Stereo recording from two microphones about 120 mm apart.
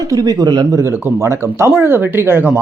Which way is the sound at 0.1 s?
30° right (ahead or behind).